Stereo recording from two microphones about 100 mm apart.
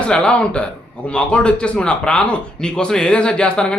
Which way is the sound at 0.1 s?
10° left (ahead or behind).